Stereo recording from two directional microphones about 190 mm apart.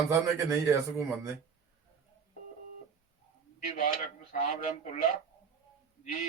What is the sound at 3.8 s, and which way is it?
A man's voice, 45° left (ahead or behind).